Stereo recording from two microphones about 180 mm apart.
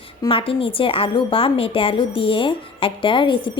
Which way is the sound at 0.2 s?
30° left (ahead or behind).